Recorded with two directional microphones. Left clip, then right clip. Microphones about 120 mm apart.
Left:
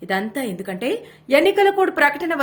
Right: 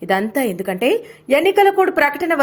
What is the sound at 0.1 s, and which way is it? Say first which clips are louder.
A woman's voice: right 5 dB; 65° right (ahead or behind).